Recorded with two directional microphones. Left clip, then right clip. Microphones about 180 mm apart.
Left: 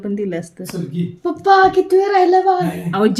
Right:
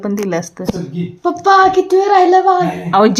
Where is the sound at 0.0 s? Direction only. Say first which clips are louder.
Right 5 dB; 10° left (ahead or behind).